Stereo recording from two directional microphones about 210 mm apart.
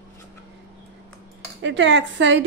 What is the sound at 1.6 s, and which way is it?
Speech, 60° right (ahead or behind).